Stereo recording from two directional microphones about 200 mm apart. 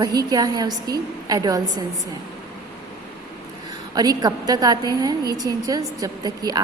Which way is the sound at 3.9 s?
20° right (ahead or behind).